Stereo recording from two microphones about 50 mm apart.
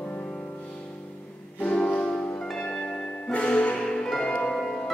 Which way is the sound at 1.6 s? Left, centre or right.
Left.